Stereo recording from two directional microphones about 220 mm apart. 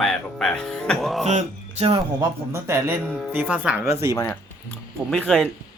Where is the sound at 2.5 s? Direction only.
10° right (ahead or behind).